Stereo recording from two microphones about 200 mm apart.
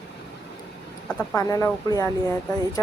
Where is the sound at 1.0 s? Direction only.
5° left (ahead or behind).